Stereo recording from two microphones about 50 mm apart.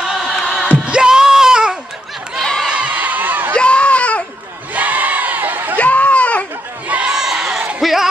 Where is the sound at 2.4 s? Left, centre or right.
Centre.